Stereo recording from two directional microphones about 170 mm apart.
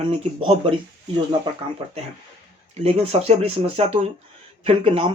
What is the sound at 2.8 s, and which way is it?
Speech, 35° right (ahead or behind).